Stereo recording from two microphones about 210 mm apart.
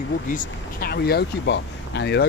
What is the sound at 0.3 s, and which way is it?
Speech, 45° left (ahead or behind).